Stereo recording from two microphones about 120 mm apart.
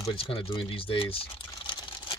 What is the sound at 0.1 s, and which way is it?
Speech, 50° left (ahead or behind).